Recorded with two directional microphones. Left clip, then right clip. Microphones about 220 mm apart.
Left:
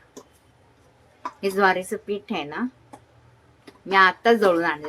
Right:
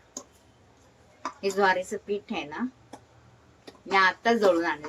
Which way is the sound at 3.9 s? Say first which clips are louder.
Left 5 dB; 20° left (ahead or behind).